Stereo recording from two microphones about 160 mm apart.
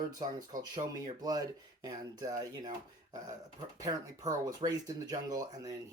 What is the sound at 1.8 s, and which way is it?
Speech, 25° right (ahead or behind).